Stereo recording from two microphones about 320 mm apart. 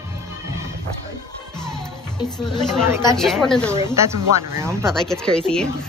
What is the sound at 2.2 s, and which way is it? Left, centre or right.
Speech, centre.